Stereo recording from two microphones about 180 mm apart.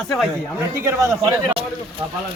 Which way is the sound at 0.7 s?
15° right (ahead or behind).